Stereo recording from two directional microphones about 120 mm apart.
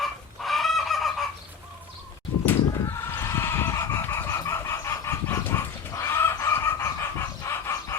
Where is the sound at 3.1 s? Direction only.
20° left (ahead or behind).